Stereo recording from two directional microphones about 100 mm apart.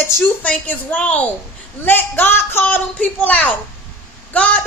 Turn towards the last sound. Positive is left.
turn(degrees=15)  # may be behind; listen again after turning